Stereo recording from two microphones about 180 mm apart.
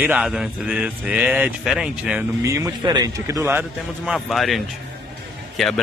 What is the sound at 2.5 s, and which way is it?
A man's voice, 15° right (ahead or behind).